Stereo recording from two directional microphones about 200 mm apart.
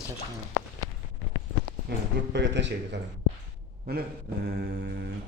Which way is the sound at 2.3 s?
65° right (ahead or behind).